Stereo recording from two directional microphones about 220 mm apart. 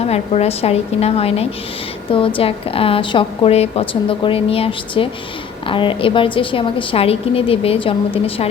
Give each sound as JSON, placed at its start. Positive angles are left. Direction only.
{"t": 0.0, "sound": "a woman's voice", "side_deg": 30}